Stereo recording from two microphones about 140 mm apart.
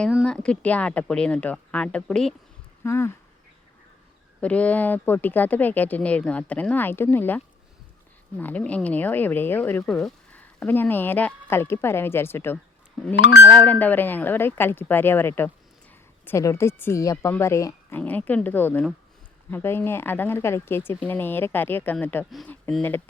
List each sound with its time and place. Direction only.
0.3 s speech: 5° left (ahead or behind)
2.8 s speech: 20° left (ahead or behind)
4.4 s speech: 10° left (ahead or behind)
18.0 s speech: 10° left (ahead or behind)